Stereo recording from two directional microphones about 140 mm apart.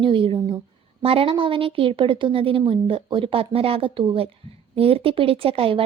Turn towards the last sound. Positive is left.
turn(degrees=-40)  # may be behind; listen again after turning